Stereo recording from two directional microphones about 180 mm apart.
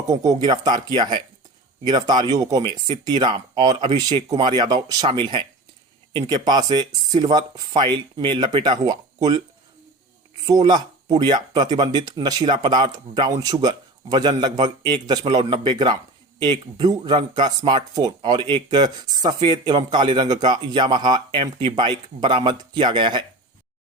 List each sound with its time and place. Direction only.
0.1 s speech: 20° right (ahead or behind)
10.4 s speech: 25° right (ahead or behind)